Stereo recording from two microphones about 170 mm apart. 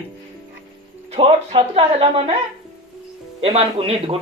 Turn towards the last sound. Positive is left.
turn(degrees=-35)  # may be behind; listen again after turning